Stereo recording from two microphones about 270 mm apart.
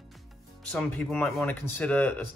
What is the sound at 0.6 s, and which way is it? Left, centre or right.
Speech, centre.